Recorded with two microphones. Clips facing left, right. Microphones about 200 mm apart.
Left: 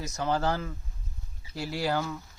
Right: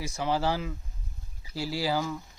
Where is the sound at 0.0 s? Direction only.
10° right (ahead or behind).